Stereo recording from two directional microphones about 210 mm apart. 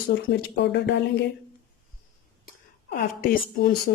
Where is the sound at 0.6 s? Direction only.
55° left (ahead or behind).